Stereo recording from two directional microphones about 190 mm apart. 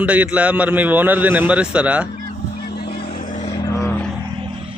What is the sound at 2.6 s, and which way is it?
Vehicle, 60° left (ahead or behind).